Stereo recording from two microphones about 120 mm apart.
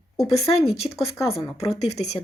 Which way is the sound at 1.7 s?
65° left (ahead or behind).